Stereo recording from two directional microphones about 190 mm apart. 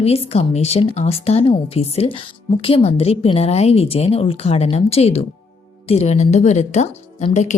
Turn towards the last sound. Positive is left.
turn(degrees=40)  # may be behind; listen again after turning